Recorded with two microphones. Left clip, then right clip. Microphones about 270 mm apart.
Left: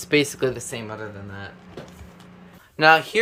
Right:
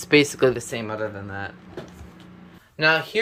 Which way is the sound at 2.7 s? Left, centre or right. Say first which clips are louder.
Left 4 dB; centre.